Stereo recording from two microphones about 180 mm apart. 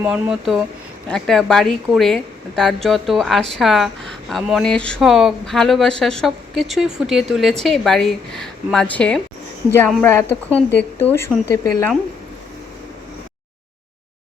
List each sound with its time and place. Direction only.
0.0 s a woman's voice: 5° right (ahead or behind); by 11.9 s 15° left (ahead or behind)